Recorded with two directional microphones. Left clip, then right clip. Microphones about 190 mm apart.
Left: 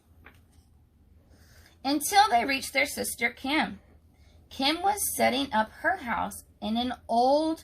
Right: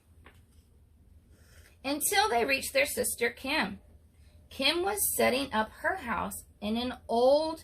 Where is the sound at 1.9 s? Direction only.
15° right (ahead or behind).